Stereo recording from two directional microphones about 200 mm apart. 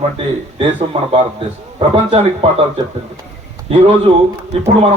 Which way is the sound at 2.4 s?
25° right (ahead or behind).